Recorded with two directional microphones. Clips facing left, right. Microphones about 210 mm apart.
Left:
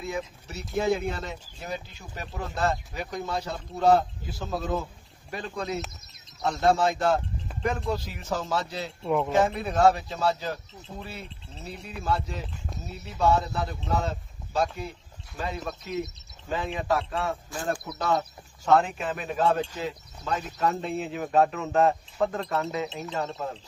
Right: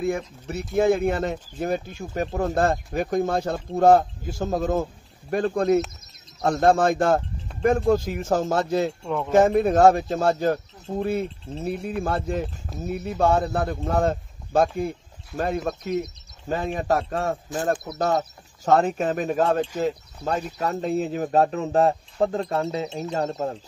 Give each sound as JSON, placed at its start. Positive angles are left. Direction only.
{"t": 0.0, "sound": "speech", "side_deg": -50}